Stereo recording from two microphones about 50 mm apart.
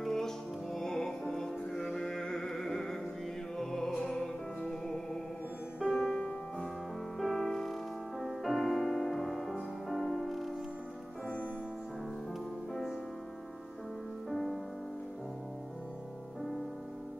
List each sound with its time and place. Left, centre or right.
0.0 s music: centre
14.3 s music: centre